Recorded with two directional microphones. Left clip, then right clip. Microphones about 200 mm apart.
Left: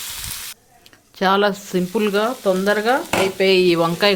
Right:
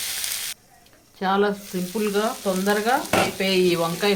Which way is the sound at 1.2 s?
50° left (ahead or behind).